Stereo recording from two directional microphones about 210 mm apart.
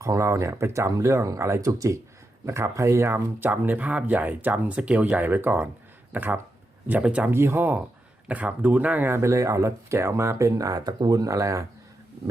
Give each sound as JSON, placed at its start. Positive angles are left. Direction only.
{"t": 0.0, "sound": "speech", "side_deg": -15}